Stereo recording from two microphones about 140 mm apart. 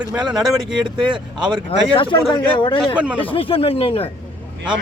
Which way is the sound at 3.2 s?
40° left (ahead or behind).